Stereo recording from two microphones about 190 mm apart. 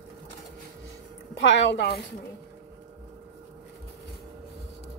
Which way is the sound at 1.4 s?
70° left (ahead or behind).